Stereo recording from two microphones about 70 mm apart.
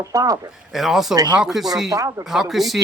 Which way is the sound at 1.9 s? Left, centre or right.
Right.